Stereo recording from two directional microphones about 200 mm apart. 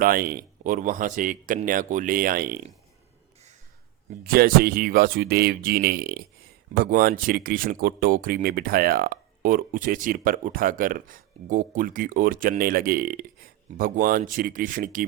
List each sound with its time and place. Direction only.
0.0 s speech: 45° right (ahead or behind)
4.2 s speech: 50° right (ahead or behind)